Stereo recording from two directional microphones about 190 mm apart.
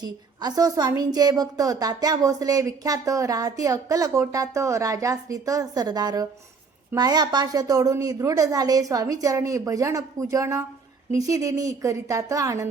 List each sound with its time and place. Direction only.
0.0 s a woman's voice: 20° right (ahead or behind)